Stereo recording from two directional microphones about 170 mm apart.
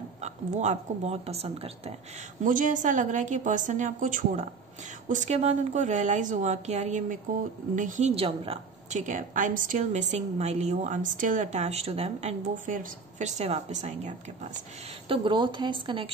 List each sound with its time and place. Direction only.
0.2 s speech: 45° right (ahead or behind)
2.4 s a woman's voice: 50° right (ahead or behind)
8.1 s speech: 35° right (ahead or behind)
8.9 s a woman's voice: 50° right (ahead or behind)
15.0 s a woman's voice: 25° right (ahead or behind)